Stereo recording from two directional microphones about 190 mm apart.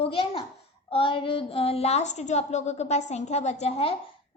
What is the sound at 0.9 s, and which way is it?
A woman's voice, 25° left (ahead or behind).